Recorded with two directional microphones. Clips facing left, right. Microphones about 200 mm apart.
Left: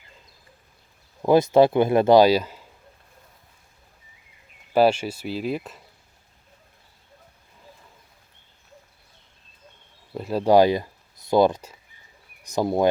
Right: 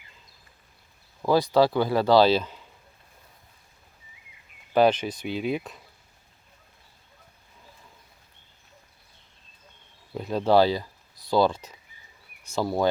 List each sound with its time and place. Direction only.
1.2 s speech: 20° left (ahead or behind)
4.7 s speech: 5° left (ahead or behind)
10.2 s speech: 5° left (ahead or behind)